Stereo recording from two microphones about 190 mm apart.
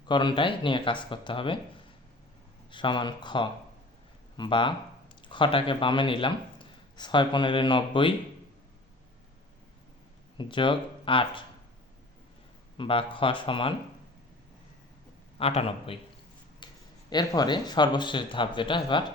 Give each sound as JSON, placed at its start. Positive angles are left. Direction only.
{"t": 0.1, "sound": "speech", "side_deg": 25}
{"t": 2.7, "sound": "speech", "side_deg": 25}
{"t": 10.3, "sound": "speech", "side_deg": 25}
{"t": 12.7, "sound": "speech", "side_deg": 25}
{"t": 15.4, "sound": "a man's voice", "side_deg": 30}
{"t": 16.6, "sound": "a sound", "side_deg": 25}
{"t": 17.1, "sound": "speech", "side_deg": 20}